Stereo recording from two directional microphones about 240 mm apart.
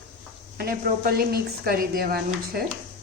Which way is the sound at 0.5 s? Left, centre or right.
Right.